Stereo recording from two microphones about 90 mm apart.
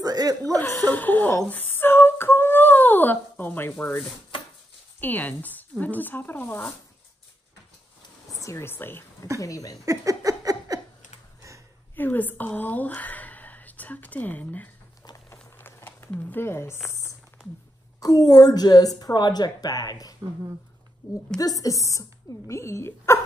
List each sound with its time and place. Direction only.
0.0 s chuckle: 45° right (ahead or behind)
0.8 s speech: 20° left (ahead or behind)
1.5 s humming: 20° left (ahead or behind)
5.0 s speech: 20° left (ahead or behind)
8.4 s speech: 35° left (ahead or behind)
9.4 s speech: 40° left (ahead or behind)
9.8 s a sound: 40° right (ahead or behind)
11.9 s speech: 20° left (ahead or behind)
15.5 s a sound: 25° left (ahead or behind)
18.0 s a woman's voice: 45° left (ahead or behind)
21.4 s speech: 40° left (ahead or behind)